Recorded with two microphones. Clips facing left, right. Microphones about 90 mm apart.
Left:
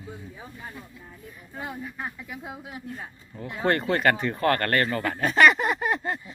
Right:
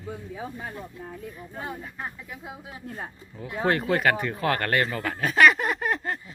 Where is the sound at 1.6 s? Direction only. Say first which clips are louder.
Left 1 dB; 15° left (ahead or behind).